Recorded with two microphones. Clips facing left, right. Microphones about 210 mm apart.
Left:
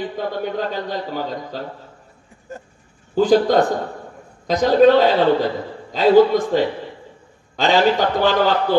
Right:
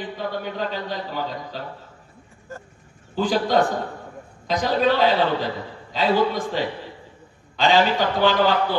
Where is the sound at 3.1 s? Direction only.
45° left (ahead or behind).